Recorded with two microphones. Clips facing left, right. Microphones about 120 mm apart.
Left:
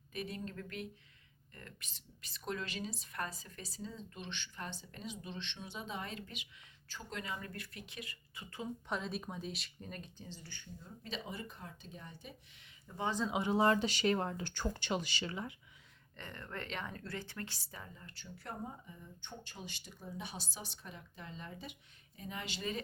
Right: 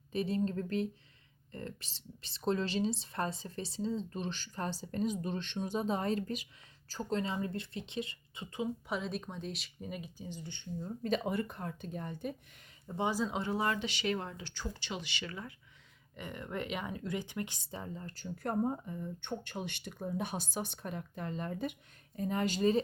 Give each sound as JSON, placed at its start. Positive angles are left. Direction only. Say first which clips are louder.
{"t": 0.1, "sound": "speech", "louder": "right 10 dB", "side_deg": -30}
{"t": 8.9, "sound": "speech", "louder": "right 2 dB", "side_deg": 0}
{"t": 10.8, "sound": "speech", "louder": "right 12 dB", "side_deg": -45}
{"t": 12.9, "sound": "speech", "louder": "right 7 dB", "side_deg": -30}
{"t": 13.3, "sound": "speech", "louder": "left 3 dB", "side_deg": 20}
{"t": 15.2, "sound": "speech", "louder": "left 2 dB", "side_deg": 25}
{"t": 16.1, "sound": "speech", "louder": "right 6 dB", "side_deg": -15}